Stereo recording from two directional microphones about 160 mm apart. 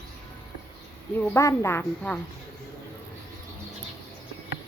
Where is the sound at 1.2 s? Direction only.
15° left (ahead or behind).